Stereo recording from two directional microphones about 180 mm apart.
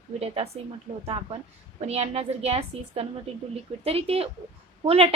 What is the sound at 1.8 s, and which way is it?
A woman's voice, 35° right (ahead or behind).